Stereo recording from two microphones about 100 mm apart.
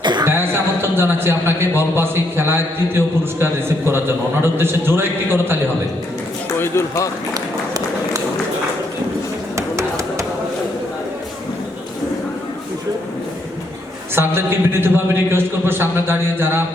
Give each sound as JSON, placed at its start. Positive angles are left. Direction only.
{"t": 0.0, "sound": "music", "side_deg": -50}
{"t": 0.3, "sound": "a man's voice", "side_deg": -25}
{"t": 6.6, "sound": "speech", "side_deg": 30}
{"t": 9.6, "sound": "music", "side_deg": -30}
{"t": 14.2, "sound": "a man's voice", "side_deg": -25}